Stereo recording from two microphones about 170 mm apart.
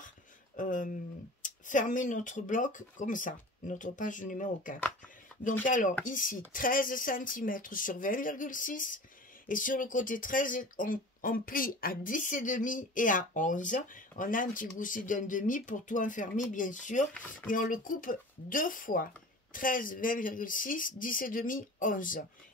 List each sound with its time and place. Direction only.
0.6 s speech: 50° left (ahead or behind)